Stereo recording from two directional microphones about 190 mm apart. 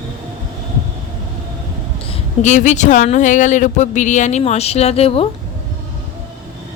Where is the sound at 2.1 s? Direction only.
40° left (ahead or behind).